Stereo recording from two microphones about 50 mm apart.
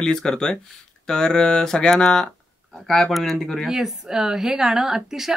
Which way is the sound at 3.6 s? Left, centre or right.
Centre.